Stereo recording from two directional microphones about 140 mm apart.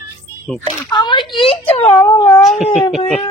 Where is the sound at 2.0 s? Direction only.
25° left (ahead or behind).